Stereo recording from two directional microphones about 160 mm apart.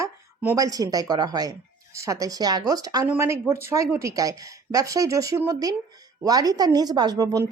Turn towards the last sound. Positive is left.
turn(degrees=-25)  # may be behind; listen again after turning